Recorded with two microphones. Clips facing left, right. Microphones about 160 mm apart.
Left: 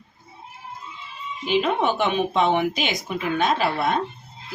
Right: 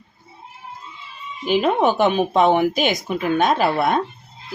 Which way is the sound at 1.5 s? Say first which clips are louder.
Right 4 dB; 45° right (ahead or behind).